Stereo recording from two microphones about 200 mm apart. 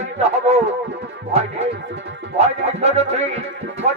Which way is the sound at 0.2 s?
30° right (ahead or behind).